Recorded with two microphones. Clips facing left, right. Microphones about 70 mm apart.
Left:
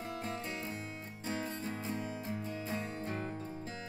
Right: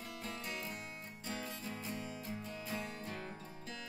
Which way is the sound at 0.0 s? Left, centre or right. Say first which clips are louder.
Left 5 dB; left.